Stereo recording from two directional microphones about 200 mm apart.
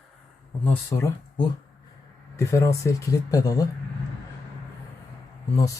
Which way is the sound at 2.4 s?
15° left (ahead or behind).